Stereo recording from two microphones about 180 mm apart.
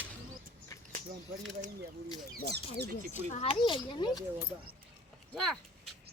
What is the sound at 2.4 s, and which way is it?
Speech, 70° right (ahead or behind).